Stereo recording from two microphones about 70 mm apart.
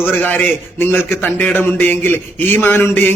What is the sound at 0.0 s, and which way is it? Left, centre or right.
A man's voice, left.